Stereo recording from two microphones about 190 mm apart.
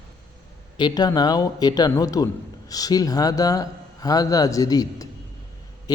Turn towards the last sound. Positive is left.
turn(degrees=20)  # may be behind; listen again after turning